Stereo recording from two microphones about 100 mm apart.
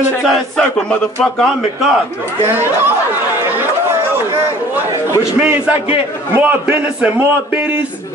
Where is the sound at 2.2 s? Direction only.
20° right (ahead or behind).